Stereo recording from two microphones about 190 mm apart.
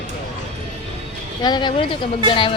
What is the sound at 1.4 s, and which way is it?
A woman's voice, 25° left (ahead or behind).